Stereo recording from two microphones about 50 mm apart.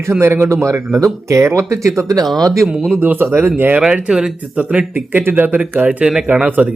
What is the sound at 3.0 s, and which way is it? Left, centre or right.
Speech, right.